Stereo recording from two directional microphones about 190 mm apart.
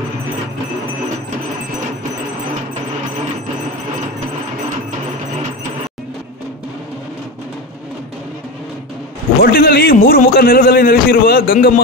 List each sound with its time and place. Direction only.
9.4 s a man's voice: 50° left (ahead or behind)